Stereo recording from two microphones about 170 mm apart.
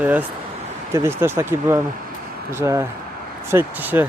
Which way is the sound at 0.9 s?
15° right (ahead or behind).